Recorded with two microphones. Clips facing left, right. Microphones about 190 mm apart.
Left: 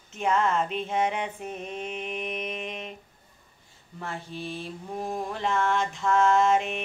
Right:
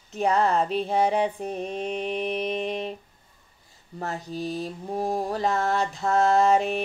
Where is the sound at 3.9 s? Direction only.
40° right (ahead or behind).